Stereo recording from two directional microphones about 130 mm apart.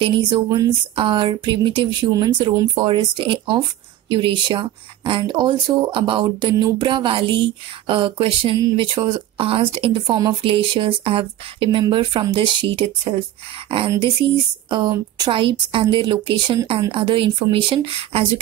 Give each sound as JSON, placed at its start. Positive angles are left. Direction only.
{"t": 0.0, "sound": "speech", "side_deg": -40}
{"t": 14.7, "sound": "speech", "side_deg": -35}